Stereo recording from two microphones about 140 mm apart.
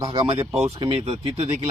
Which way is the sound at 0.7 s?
40° right (ahead or behind).